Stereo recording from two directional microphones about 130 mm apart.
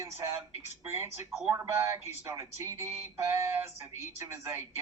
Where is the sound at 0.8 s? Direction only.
20° right (ahead or behind).